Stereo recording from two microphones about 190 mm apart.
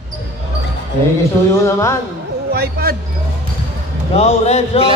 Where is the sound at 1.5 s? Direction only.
15° left (ahead or behind).